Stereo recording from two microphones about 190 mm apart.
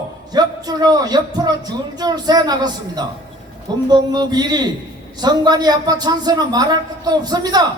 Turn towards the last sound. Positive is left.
turn(degrees=-20)  # may be behind; listen again after turning